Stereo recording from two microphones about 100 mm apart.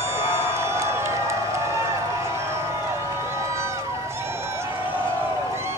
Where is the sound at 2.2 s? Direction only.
25° right (ahead or behind).